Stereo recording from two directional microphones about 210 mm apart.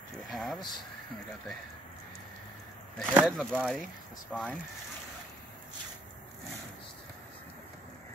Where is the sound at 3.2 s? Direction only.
Centre (ahead or behind).